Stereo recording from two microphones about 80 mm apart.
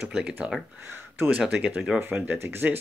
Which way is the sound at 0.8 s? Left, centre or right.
Right.